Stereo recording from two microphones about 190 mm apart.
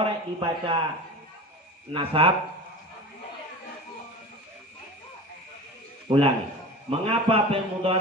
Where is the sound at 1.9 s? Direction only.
30° right (ahead or behind).